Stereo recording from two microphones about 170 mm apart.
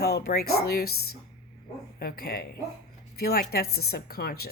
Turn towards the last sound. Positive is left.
turn(degrees=65)  # may be behind; listen again after turning